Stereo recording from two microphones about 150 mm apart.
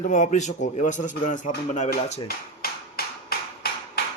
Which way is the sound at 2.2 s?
90° left.